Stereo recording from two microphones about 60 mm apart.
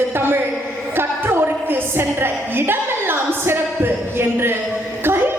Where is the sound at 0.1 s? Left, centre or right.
Right.